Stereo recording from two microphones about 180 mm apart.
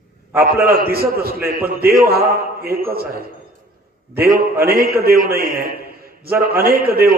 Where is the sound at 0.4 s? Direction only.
55° right (ahead or behind).